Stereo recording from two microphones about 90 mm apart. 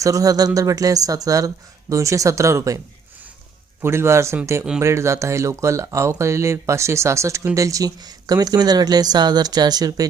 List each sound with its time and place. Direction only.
0.0 s speech: 40° right (ahead or behind)
3.8 s speech: 30° right (ahead or behind); by 10.1 s 45° right (ahead or behind)